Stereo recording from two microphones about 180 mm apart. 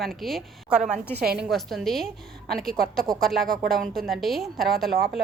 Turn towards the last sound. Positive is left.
turn(degrees=0)  # may be behind; listen again after turning